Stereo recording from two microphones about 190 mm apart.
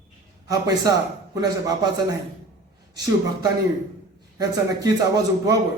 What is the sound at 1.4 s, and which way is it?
Speech, 20° right (ahead or behind).